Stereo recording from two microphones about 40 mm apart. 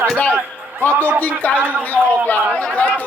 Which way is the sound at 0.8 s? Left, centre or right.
Left.